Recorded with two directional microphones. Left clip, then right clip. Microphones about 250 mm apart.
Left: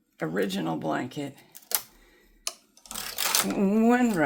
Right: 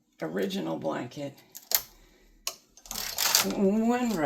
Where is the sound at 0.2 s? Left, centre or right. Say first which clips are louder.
Left 3 dB; left.